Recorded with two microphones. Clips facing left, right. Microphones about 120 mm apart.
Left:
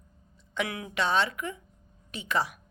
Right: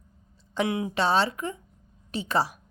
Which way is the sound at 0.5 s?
25° right (ahead or behind).